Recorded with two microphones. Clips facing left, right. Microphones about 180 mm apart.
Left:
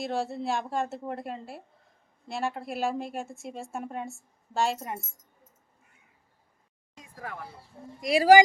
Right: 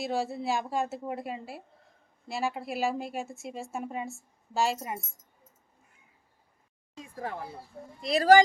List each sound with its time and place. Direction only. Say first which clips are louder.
0.0 s a woman's voice: even; centre (ahead or behind)
7.0 s speech: right 4 dB; 30° right (ahead or behind)
8.0 s speech: left 2 dB; 10° left (ahead or behind)